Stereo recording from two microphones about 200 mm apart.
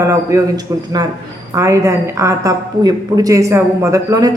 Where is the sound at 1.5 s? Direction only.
15° right (ahead or behind).